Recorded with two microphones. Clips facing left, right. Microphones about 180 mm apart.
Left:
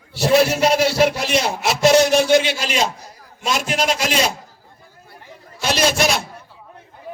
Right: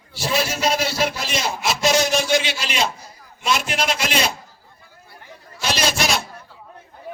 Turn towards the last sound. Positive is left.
turn(degrees=55)  # may be behind; listen again after turning